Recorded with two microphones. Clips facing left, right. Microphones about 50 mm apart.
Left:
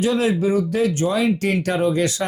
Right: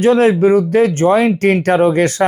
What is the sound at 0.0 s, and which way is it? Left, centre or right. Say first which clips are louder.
Speech: right 8 dB; right.